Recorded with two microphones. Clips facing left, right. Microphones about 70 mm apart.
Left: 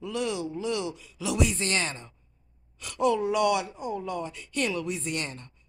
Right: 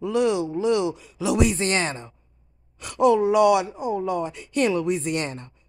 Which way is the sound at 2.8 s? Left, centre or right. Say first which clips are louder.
Right 7 dB; centre.